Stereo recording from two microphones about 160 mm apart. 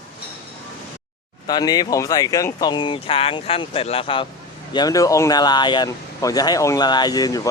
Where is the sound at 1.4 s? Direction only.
25° left (ahead or behind).